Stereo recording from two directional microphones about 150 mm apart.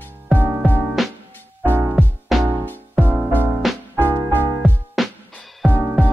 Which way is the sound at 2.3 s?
Centre (ahead or behind).